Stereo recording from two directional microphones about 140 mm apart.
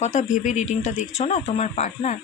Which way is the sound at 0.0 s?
55° left (ahead or behind).